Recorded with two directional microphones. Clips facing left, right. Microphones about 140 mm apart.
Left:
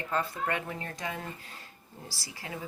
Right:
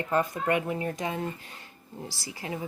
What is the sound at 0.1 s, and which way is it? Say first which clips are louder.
A woman's voice: right 5 dB; 20° right (ahead or behind).